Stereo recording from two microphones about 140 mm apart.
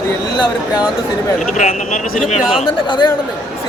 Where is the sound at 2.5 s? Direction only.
35° left (ahead or behind).